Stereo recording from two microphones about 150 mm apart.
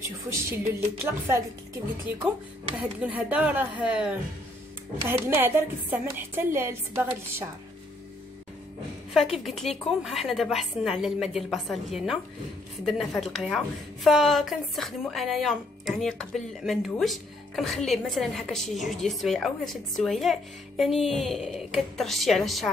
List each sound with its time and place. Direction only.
0.3 s a woman's voice: 20° right (ahead or behind)
2.8 s a woman's voice: 10° right (ahead or behind)
5.0 s a woman's voice: 15° right (ahead or behind)
9.1 s speech: centre (ahead or behind)